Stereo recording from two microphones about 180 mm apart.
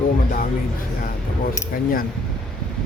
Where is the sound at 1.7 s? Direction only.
50° left (ahead or behind).